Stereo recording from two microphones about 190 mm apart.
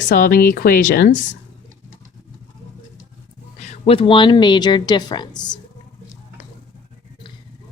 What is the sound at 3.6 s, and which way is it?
A woman's voice, 30° left (ahead or behind).